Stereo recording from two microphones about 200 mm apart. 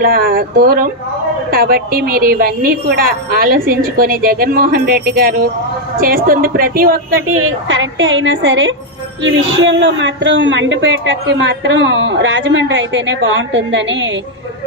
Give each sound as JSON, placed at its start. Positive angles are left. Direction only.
{"t": 0.0, "sound": "a woman's voice", "side_deg": -45}
{"t": 7.6, "sound": "a man's voice", "side_deg": -70}